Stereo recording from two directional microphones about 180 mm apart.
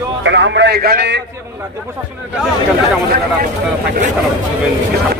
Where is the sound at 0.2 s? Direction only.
80° right.